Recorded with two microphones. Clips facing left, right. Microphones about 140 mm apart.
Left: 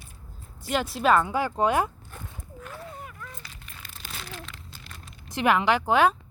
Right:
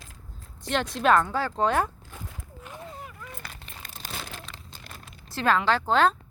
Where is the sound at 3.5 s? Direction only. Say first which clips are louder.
Right 2 dB; 40° right (ahead or behind).